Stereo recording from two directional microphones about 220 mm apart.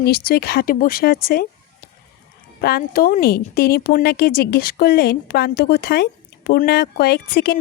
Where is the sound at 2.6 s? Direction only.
45° left (ahead or behind).